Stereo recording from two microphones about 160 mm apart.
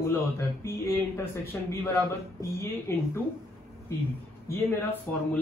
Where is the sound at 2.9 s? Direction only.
15° left (ahead or behind).